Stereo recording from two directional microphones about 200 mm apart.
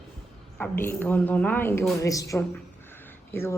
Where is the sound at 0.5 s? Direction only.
10° left (ahead or behind).